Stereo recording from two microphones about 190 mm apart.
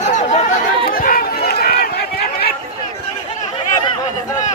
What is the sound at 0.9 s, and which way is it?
Run, 50° left (ahead or behind).